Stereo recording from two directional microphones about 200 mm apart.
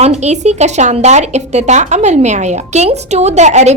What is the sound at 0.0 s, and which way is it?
Speech, 35° right (ahead or behind).